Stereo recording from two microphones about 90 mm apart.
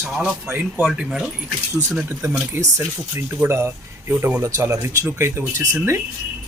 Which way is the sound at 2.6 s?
25° right (ahead or behind).